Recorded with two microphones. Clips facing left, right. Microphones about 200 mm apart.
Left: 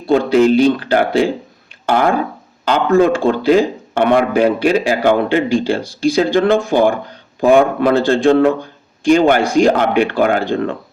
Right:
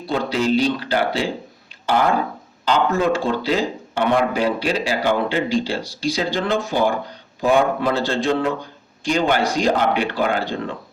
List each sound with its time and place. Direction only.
0.1 s speech: 55° left (ahead or behind)
2.6 s speech: 55° left (ahead or behind)